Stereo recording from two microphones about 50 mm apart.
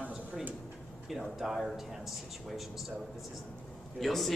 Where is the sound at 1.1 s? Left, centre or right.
Centre.